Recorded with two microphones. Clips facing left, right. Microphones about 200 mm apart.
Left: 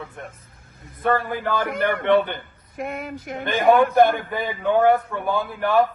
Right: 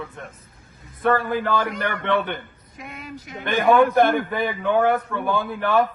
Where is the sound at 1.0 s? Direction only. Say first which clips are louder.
Right 2 dB; 15° left (ahead or behind).